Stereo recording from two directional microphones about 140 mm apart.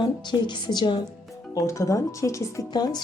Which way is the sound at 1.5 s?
20° left (ahead or behind).